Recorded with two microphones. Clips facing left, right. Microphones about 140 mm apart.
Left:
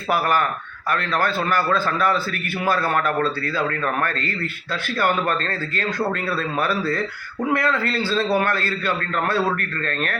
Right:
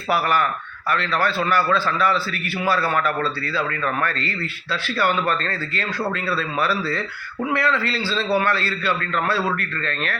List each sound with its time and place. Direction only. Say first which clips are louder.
0.1 s a man's voice: even; 45° left (ahead or behind)
6.0 s speech: left 1 dB; 20° left (ahead or behind)
6.3 s a man's voice: even; 45° left (ahead or behind)